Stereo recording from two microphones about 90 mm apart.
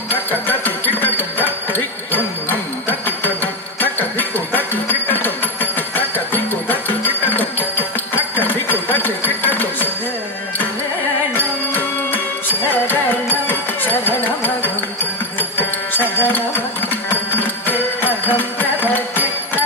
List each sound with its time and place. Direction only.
0.1 s music: 20° left (ahead or behind)
3.8 s a sound: 20° left (ahead or behind)
11.3 s music: 20° left (ahead or behind)